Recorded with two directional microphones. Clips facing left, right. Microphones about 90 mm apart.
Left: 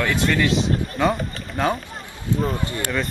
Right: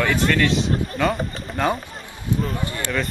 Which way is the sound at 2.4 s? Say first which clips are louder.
Left 2 dB; 20° left (ahead or behind).